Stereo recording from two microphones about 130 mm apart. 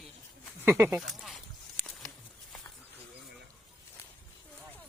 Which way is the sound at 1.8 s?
5° left (ahead or behind).